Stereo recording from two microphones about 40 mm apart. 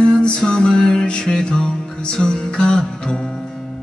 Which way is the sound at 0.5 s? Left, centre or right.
Centre.